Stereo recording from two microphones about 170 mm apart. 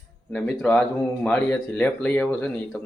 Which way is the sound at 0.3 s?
5° left (ahead or behind).